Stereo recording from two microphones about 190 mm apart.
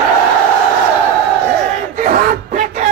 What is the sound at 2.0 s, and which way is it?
Battle cry, 45° right (ahead or behind).